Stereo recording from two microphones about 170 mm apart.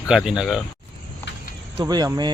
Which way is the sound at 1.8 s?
25° right (ahead or behind).